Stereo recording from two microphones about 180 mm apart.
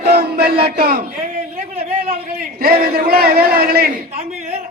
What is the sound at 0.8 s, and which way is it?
Speech, 60° right (ahead or behind).